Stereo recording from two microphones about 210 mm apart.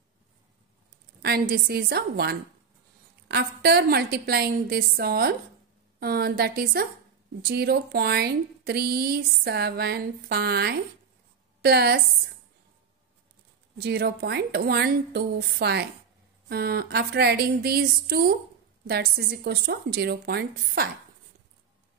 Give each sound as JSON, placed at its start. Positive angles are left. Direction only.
{"t": 1.5, "sound": "a woman's voice", "side_deg": -50}
{"t": 13.7, "sound": "a woman's voice", "side_deg": -50}